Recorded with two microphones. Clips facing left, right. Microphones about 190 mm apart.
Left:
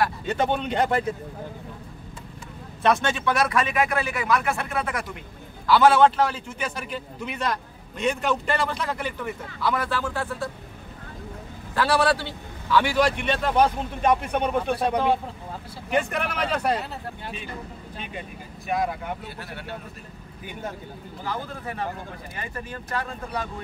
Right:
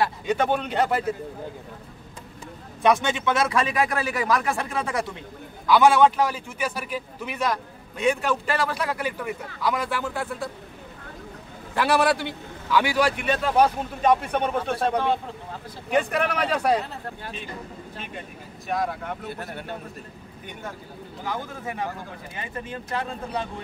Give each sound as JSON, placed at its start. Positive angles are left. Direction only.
{"t": 0.2, "sound": "speech", "side_deg": -10}
{"t": 2.8, "sound": "a man's voice", "side_deg": -15}
{"t": 5.7, "sound": "a man's voice", "side_deg": -10}
{"t": 11.7, "sound": "a man's voice", "side_deg": -15}
{"t": 14.0, "sound": "speech", "side_deg": 10}
{"t": 16.3, "sound": "a man's voice", "side_deg": -10}
{"t": 17.9, "sound": "speech", "side_deg": 0}
{"t": 19.2, "sound": "a man's voice", "side_deg": -45}
{"t": 21.2, "sound": "a man's voice", "side_deg": -15}